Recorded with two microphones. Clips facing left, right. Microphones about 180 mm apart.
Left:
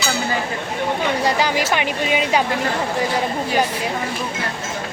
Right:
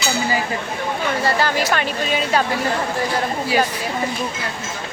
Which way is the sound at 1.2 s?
15° left (ahead or behind).